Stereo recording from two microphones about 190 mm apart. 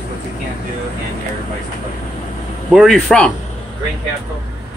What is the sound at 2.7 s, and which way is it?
Speech, centre (ahead or behind).